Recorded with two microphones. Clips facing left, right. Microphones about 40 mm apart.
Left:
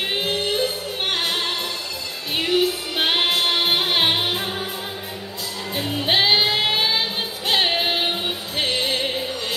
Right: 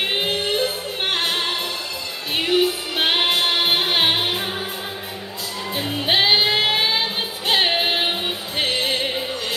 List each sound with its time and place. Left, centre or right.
0.0 s music: centre
5.8 s music: centre